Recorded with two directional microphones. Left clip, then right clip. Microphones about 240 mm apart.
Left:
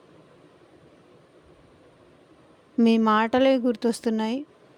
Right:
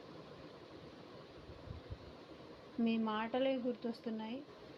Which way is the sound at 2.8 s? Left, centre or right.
Left.